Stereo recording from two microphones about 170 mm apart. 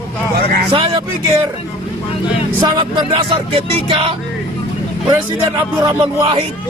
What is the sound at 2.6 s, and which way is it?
Music, 25° right (ahead or behind).